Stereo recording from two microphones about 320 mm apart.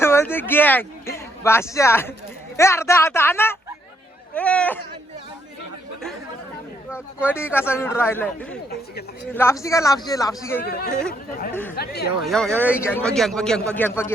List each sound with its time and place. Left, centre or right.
0.0 s a sound: centre
2.6 s a man's voice: centre
7.2 s a man's voice: centre
10.6 s speech: left
12.2 s a man's voice: centre